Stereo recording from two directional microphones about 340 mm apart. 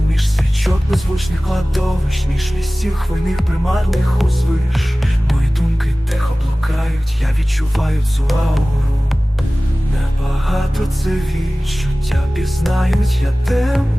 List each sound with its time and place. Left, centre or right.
0.2 s music: centre
7.8 s music: centre
10.4 s music: centre